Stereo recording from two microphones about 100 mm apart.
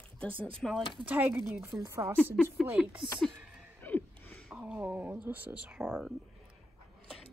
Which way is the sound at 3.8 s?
20° left (ahead or behind).